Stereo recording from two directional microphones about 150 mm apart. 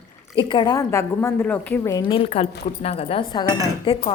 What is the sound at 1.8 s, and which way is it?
Speech, 20° left (ahead or behind).